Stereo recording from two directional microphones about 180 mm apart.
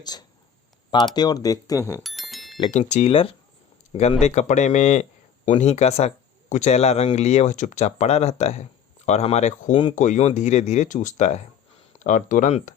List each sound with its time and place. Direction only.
0.0 s speech: 20° left (ahead or behind)
2.0 s bicycle bell: centre (ahead or behind)
2.7 s speech: 35° left (ahead or behind)